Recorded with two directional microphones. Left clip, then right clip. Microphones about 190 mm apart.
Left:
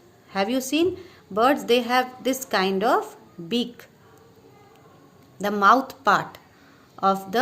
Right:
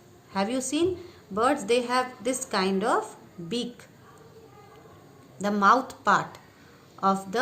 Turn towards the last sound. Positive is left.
turn(degrees=40)  # may be behind; listen again after turning